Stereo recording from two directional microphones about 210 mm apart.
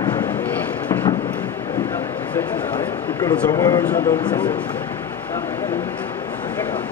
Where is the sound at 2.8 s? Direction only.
20° left (ahead or behind).